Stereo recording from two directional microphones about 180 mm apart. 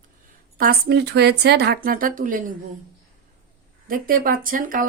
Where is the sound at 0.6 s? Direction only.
60° right (ahead or behind).